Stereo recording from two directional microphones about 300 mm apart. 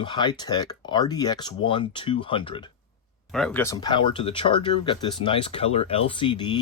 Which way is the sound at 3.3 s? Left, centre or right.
Centre.